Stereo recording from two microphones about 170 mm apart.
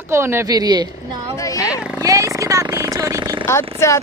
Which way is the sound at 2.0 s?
20° right (ahead or behind).